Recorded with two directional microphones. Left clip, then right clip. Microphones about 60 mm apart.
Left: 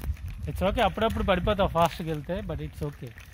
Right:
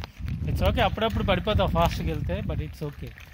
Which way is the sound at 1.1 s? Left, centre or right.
Centre.